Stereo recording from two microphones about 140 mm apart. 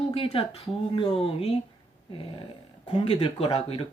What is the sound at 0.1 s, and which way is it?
Speech, 40° left (ahead or behind).